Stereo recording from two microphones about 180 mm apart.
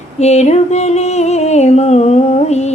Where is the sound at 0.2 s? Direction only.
35° left (ahead or behind).